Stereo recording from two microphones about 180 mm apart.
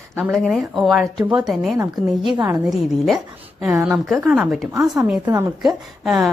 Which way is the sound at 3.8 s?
15° right (ahead or behind).